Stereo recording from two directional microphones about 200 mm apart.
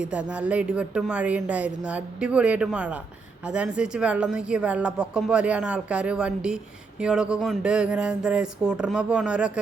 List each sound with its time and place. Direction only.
0.0 s speech: 5° right (ahead or behind)